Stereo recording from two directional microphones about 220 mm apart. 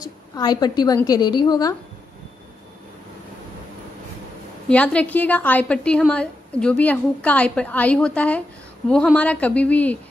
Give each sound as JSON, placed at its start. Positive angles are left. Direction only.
{"t": 0.0, "sound": "a woman's voice", "side_deg": 20}
{"t": 4.6, "sound": "a woman's voice", "side_deg": 5}